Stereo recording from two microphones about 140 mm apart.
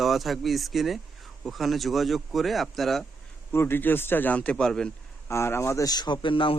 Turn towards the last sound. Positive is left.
turn(degrees=40)  # may be behind; listen again after turning